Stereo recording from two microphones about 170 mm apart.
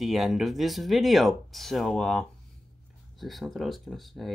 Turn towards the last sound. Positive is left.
turn(degrees=0)  # may be behind; listen again after turning